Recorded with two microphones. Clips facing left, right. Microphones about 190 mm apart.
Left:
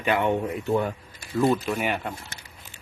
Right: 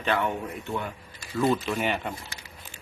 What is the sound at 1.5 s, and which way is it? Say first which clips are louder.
Speech: left 1 dB; 10° left (ahead or behind).